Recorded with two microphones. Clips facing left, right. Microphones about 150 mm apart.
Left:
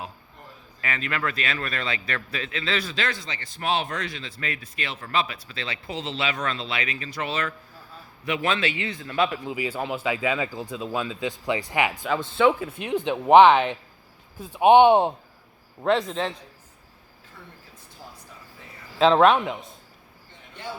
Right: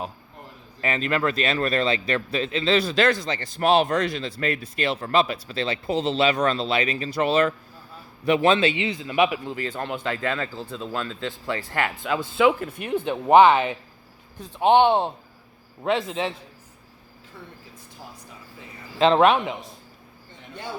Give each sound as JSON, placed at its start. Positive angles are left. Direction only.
{"t": 0.8, "sound": "a man's voice", "side_deg": -30}
{"t": 2.9, "sound": "a man's voice", "side_deg": -40}
{"t": 9.4, "sound": "speech", "side_deg": 10}
{"t": 12.0, "sound": "speech", "side_deg": -5}
{"t": 14.3, "sound": "speech", "side_deg": 10}
{"t": 15.8, "sound": "speech", "side_deg": 0}
{"t": 18.9, "sound": "speech", "side_deg": 0}